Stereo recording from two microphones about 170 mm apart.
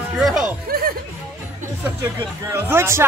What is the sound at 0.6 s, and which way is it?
Music, 60° right (ahead or behind).